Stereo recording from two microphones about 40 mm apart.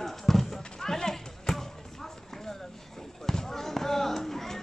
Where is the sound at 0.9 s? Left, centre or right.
Centre.